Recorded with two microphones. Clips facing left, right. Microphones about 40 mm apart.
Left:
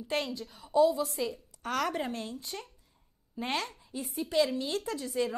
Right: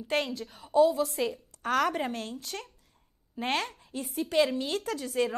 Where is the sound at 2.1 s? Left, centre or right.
Right.